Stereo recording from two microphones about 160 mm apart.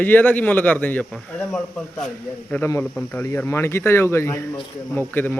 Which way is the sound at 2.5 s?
15° left (ahead or behind).